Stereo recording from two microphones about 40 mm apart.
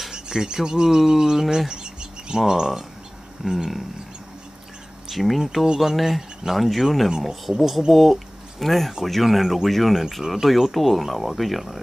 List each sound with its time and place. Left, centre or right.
0.1 s speech: centre
1.7 s a sound: right
3.4 s speech: centre
5.1 s speech: centre
10.2 s speech: centre